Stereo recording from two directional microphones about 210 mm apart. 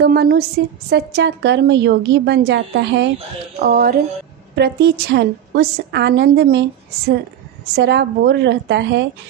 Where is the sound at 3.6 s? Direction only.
40° right (ahead or behind).